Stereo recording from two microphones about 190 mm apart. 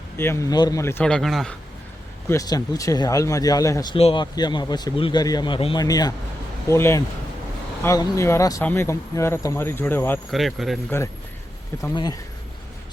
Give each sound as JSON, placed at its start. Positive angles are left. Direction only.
{"t": 0.2, "sound": "speech", "side_deg": 15}
{"t": 2.3, "sound": "speech", "side_deg": 20}
{"t": 3.9, "sound": "speech", "side_deg": 30}
{"t": 10.3, "sound": "speech", "side_deg": 0}
{"t": 11.8, "sound": "speech", "side_deg": 20}